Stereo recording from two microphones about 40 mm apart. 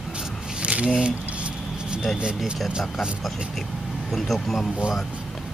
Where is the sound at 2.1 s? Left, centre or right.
Right.